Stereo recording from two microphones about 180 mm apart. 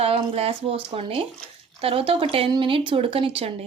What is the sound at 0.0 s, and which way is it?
Speech, 35° right (ahead or behind).